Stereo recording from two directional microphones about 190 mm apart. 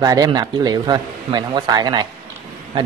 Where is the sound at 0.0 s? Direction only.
20° right (ahead or behind).